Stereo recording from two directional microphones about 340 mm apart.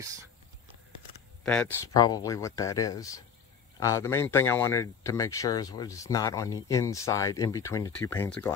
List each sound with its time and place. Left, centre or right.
1.4 s speech: centre